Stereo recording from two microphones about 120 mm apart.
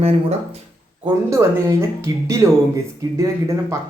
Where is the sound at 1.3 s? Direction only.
25° right (ahead or behind).